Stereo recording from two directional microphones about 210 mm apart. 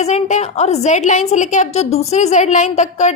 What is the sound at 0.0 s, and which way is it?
A woman's voice, 30° left (ahead or behind).